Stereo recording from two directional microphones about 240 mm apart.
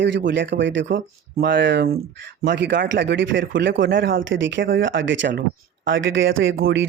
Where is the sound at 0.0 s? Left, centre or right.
Right.